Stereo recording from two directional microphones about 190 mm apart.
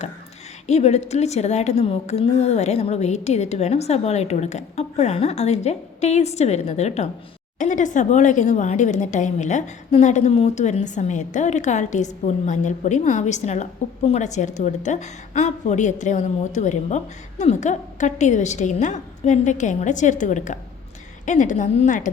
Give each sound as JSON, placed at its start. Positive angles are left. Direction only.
{"t": 0.7, "sound": "a woman's voice", "side_deg": 35}